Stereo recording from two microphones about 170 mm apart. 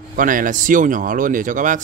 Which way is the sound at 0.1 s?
55° right (ahead or behind).